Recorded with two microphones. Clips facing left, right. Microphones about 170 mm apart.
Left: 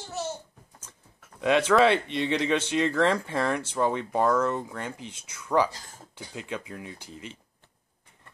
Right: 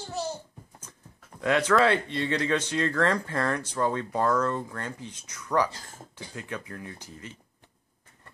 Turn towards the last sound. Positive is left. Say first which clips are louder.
# left 1 dB
turn(degrees=20)  # may be behind; listen again after turning